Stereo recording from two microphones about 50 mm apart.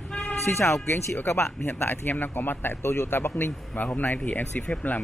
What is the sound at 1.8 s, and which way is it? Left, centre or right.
Speech, left.